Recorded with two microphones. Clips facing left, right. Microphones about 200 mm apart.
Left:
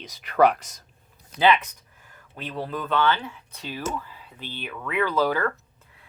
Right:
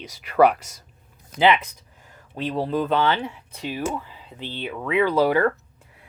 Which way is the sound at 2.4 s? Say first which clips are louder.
Right 7 dB; 30° right (ahead or behind).